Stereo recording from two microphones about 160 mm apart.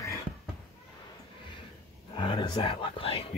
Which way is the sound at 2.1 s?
35° left (ahead or behind).